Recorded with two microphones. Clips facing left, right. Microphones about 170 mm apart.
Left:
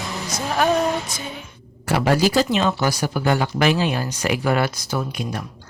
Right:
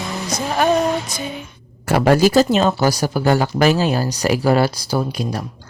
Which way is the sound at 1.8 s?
45° right (ahead or behind).